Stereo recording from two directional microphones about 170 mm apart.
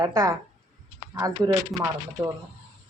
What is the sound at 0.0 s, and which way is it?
Speech, 20° right (ahead or behind).